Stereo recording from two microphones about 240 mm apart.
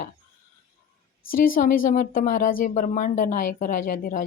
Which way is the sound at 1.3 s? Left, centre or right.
Left.